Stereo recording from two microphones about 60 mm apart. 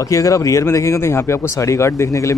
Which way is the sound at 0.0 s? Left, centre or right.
Left.